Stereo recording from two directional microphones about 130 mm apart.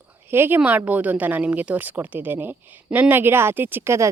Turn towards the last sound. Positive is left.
turn(degrees=-20)  # may be behind; listen again after turning